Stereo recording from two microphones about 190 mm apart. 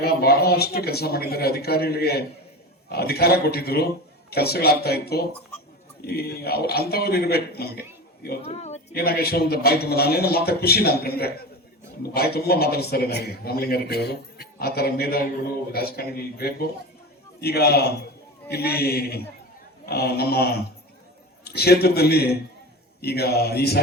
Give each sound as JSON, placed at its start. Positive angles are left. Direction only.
{"t": 0.0, "sound": "a man's voice", "side_deg": 55}
{"t": 8.4, "sound": "speech", "side_deg": 35}
{"t": 8.9, "sound": "a man's voice", "side_deg": 55}